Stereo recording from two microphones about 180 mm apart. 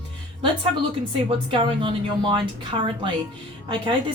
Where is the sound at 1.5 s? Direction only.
25° right (ahead or behind).